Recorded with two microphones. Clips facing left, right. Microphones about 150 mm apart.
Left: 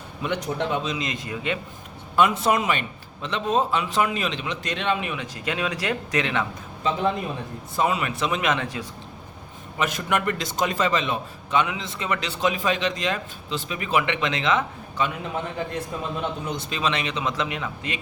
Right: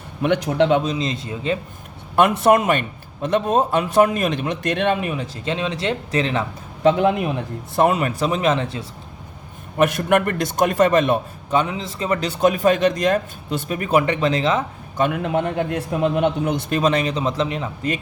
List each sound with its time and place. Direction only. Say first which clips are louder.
0.2 s a man's voice: right 9 dB; 75° right (ahead or behind)
0.9 s a man's voice: right 5 dB; 30° right (ahead or behind)
2.1 s a man's voice: right 5 dB; 60° right (ahead or behind); by 6.4 s 30° right (ahead or behind)
6.8 s a man's voice: right 8 dB; 70° right (ahead or behind)
7.8 s a man's voice: right 6 dB; 45° right (ahead or behind); by 8.8 s 30° right (ahead or behind)
9.7 s a man's voice: right 8 dB; 55° right (ahead or behind)
11.6 s a man's voice: right 4 dB; 35° right (ahead or behind)
15.0 s a man's voice: right 8 dB; 60° right (ahead or behind); by 18.0 s 40° right (ahead or behind)